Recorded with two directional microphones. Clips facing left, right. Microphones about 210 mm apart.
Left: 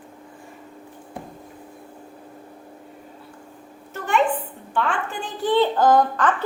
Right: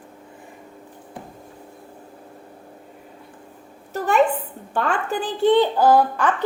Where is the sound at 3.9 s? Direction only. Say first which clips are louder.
Right 3 dB; 40° right (ahead or behind).